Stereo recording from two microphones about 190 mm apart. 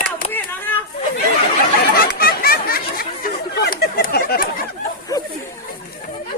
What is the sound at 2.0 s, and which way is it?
Chatter, 50° left (ahead or behind).